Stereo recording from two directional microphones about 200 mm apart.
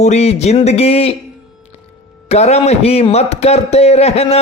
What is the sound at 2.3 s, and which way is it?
Speech, 35° left (ahead or behind).